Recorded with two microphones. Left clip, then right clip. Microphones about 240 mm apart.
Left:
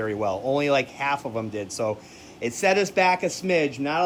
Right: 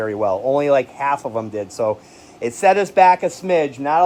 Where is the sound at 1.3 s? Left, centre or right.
Right.